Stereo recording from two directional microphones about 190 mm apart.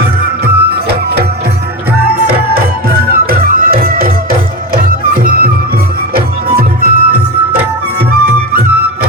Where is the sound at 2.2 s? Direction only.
55° right (ahead or behind).